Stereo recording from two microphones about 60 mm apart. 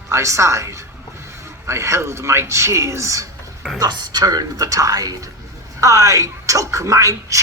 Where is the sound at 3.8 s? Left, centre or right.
Right.